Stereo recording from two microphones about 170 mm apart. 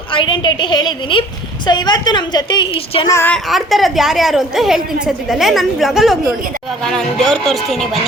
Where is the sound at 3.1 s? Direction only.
15° left (ahead or behind).